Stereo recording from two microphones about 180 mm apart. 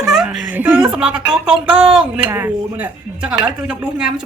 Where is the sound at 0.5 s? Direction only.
10° right (ahead or behind).